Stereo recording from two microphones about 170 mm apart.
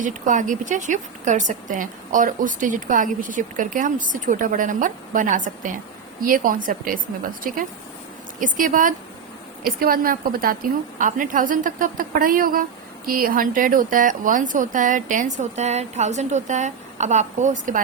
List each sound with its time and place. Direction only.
0.0 s a woman's voice: 50° right (ahead or behind)